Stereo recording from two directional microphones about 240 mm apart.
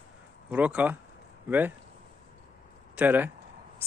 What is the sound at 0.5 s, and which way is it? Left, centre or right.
Speech, centre.